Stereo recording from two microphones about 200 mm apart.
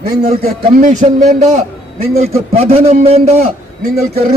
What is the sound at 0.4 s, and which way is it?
A man's voice, 40° right (ahead or behind).